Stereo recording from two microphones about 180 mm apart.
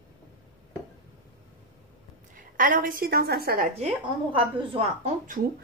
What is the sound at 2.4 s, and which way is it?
Speech, 45° right (ahead or behind).